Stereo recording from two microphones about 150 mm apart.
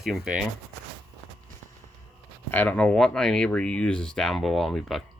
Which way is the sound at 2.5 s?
10° left (ahead or behind).